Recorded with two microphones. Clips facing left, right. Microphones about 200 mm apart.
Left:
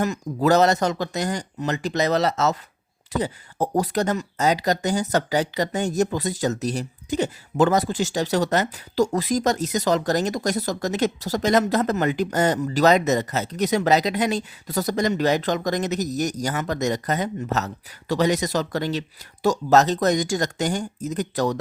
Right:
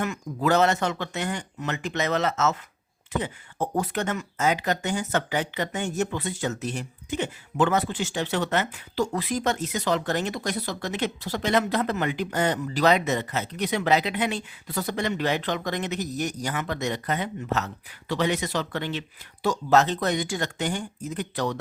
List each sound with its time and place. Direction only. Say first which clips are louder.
0.0 s speech: left 5 dB; 35° left (ahead or behind)